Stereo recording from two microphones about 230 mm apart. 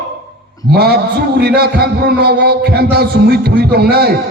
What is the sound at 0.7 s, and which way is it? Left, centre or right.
A man's voice, right.